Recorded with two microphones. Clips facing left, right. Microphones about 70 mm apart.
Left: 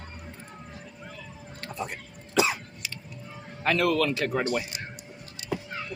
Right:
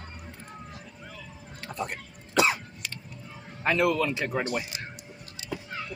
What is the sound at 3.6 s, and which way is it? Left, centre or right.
A man's voice, centre.